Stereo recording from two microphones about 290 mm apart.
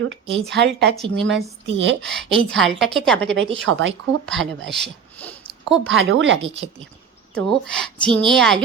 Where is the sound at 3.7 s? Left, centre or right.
Right.